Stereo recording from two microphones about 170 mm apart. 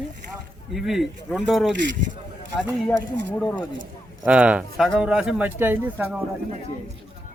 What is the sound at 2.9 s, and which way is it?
Speech, 10° left (ahead or behind).